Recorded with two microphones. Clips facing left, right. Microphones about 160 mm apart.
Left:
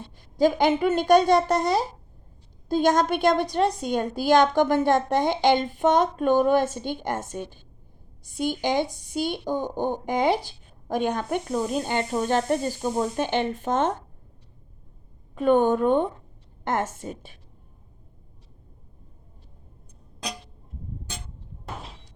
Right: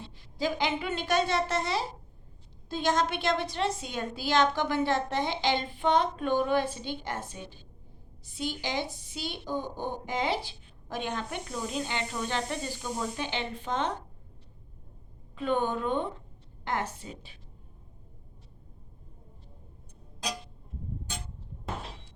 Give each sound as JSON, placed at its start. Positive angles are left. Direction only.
{"t": 0.0, "sound": "a woman's voice", "side_deg": 45}
{"t": 15.4, "sound": "a woman's voice", "side_deg": 45}